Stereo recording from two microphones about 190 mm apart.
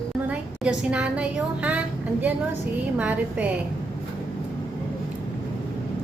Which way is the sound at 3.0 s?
10° right (ahead or behind).